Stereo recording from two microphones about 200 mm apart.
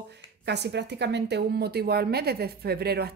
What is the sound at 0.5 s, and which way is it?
Speech, 55° right (ahead or behind).